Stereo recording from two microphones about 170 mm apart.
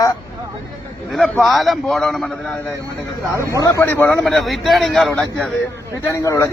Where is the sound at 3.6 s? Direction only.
15° left (ahead or behind).